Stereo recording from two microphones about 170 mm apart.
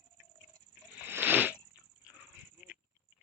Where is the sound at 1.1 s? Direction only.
10° right (ahead or behind).